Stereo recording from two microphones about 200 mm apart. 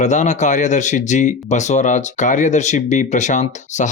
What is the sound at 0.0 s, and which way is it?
Speech, 35° left (ahead or behind).